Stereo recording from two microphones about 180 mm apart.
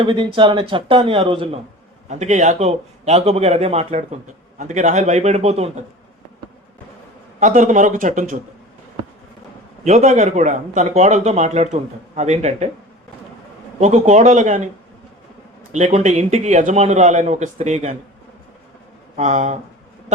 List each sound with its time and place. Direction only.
0.0 s speech: 25° right (ahead or behind)
7.3 s a man's voice: 45° right (ahead or behind)
9.8 s speech: 40° right (ahead or behind)
13.7 s speech: 40° right (ahead or behind)
15.7 s speech: 40° right (ahead or behind)
19.1 s speech: 40° right (ahead or behind)